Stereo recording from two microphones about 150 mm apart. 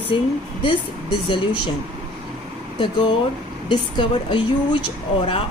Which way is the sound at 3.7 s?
30° left (ahead or behind).